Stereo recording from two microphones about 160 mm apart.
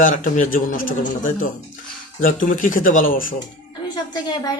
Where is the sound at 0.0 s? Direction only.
55° left (ahead or behind).